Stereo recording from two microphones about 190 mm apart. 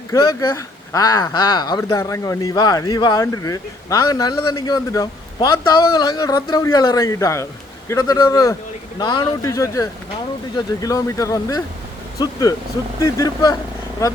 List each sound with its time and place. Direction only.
0.1 s speech: 15° left (ahead or behind)